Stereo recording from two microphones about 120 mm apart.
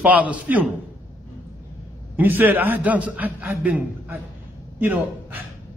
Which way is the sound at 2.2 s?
15° right (ahead or behind).